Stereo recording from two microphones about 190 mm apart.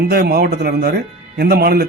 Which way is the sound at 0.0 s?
55° right (ahead or behind).